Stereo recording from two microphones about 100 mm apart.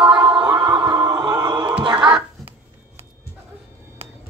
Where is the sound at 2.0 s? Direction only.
50° right (ahead or behind).